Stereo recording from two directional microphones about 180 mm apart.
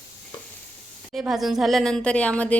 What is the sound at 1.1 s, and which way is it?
Speech, 5° right (ahead or behind).